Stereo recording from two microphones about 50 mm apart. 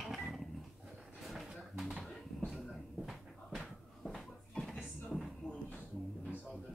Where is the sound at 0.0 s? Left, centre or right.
Centre.